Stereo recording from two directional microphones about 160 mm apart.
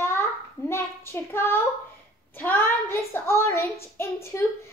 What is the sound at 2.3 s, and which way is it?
A woman's voice, 15° left (ahead or behind).